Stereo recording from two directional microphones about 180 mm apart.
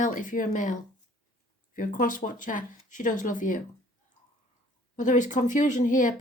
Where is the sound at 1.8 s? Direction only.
50° left (ahead or behind).